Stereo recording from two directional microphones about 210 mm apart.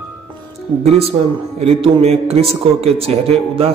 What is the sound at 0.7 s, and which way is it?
A man's voice, 20° right (ahead or behind).